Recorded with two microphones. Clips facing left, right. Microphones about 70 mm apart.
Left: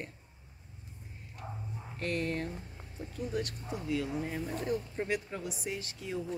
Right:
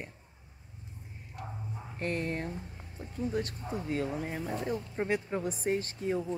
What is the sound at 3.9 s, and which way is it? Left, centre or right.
Speech, right.